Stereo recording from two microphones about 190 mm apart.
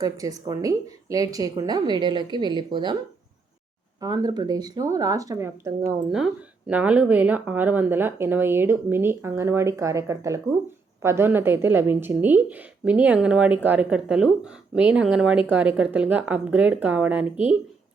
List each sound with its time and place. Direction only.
0.0 s speech: 20° right (ahead or behind)
4.0 s speech: 20° right (ahead or behind)
6.1 s speech: 5° right (ahead or behind)